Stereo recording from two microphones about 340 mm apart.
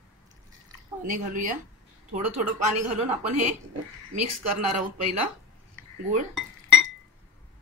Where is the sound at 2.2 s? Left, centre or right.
Right.